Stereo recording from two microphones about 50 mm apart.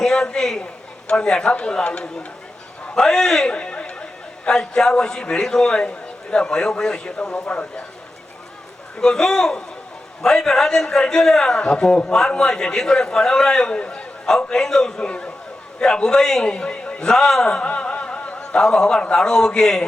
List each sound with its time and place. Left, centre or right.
0.0 s a man's voice: centre
2.9 s a man's voice: centre
3.5 s chatter: centre
4.4 s a man's voice: centre
9.0 s a man's voice: centre
18.6 s a man's voice: centre